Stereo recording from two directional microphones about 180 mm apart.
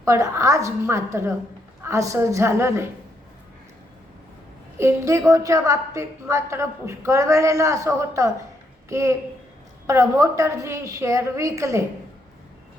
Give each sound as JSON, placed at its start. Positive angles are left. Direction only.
{"t": 0.0, "sound": "a woman's voice", "side_deg": -15}
{"t": 4.8, "sound": "a woman's voice", "side_deg": -15}